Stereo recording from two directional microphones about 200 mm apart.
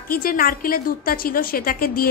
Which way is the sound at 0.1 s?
45° left (ahead or behind).